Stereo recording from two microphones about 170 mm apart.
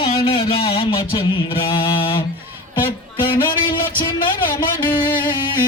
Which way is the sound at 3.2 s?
30° left (ahead or behind).